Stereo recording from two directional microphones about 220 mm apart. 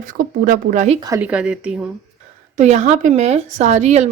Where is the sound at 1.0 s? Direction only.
10° right (ahead or behind).